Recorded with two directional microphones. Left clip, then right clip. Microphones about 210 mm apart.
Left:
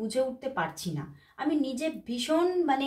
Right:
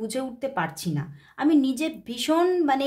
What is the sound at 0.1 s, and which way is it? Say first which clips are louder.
A woman's voice: right 1 dB; 50° right (ahead or behind).